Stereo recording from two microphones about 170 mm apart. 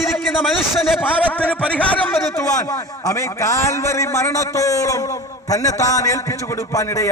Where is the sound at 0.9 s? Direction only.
10° left (ahead or behind).